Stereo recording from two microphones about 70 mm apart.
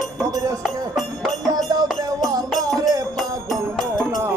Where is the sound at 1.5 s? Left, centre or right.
Right.